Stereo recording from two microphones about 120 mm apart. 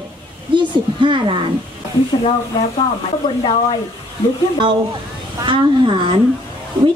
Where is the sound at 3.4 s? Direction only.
45° left (ahead or behind).